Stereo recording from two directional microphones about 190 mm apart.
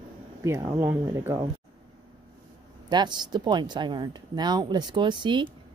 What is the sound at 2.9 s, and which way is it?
Speech, 25° right (ahead or behind).